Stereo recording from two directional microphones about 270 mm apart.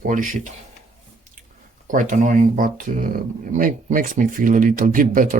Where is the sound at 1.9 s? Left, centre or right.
Right.